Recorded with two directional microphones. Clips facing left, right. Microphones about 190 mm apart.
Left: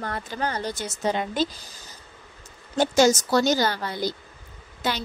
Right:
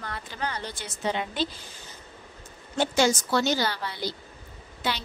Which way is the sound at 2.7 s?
40° left (ahead or behind).